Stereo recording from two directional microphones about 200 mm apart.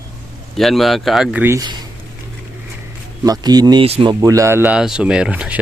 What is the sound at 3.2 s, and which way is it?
Speech, 20° right (ahead or behind).